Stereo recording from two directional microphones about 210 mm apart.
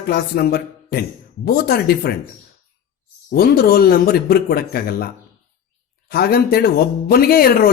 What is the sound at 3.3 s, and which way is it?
Speech, 45° left (ahead or behind).